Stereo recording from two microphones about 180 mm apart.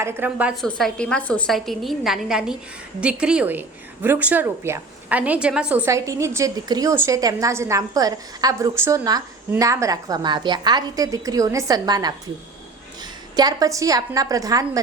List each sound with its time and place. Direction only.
0.0 s a woman's voice: 10° right (ahead or behind)